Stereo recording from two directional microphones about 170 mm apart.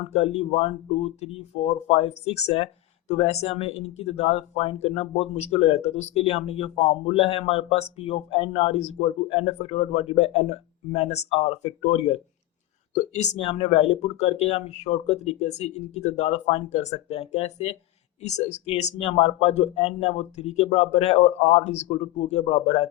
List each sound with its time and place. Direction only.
0.1 s speech: 40° left (ahead or behind)